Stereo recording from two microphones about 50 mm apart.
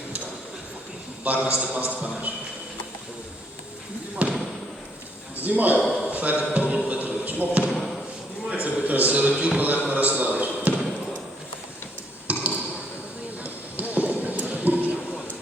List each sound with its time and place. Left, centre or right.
1.2 s a man's voice: right
4.2 s basketball bounce: right
5.4 s a man's voice: right
5.8 s a sound: centre
6.1 s a sound: right
6.5 s speech: right
6.8 s basketball bounce: right
7.7 s speech: centre
8.6 s a man's voice: right
12.3 s basketball bounce: right
13.4 s a sound: right